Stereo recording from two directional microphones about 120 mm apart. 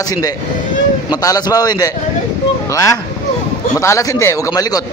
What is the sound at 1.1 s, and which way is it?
Speech, 35° left (ahead or behind).